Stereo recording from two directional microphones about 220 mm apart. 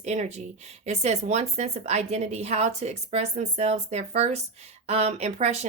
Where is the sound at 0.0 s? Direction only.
30° right (ahead or behind).